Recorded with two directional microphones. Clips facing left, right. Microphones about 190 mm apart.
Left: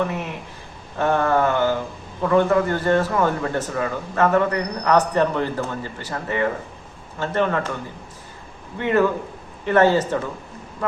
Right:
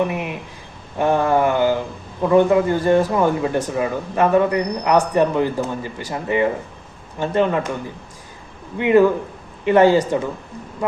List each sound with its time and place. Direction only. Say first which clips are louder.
0.0 s speech: right 3 dB; 15° right (ahead or behind)
8.8 s speech: right 5 dB; 15° right (ahead or behind)